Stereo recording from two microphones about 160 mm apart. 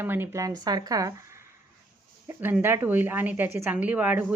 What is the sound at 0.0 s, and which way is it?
Speech, 15° right (ahead or behind).